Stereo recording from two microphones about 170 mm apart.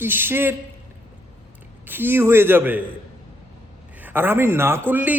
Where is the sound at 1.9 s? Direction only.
10° right (ahead or behind).